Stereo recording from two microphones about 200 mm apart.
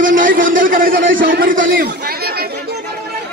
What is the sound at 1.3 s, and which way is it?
Speech, 45° right (ahead or behind).